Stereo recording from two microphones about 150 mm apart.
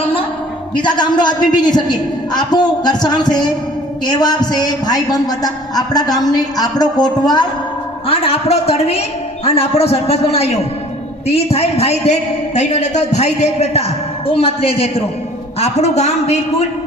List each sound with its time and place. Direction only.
0.8 s a man's voice: 30° left (ahead or behind)
8.0 s a man's voice: 40° left (ahead or behind)